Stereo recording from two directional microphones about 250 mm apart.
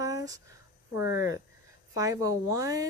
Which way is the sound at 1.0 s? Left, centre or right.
Left.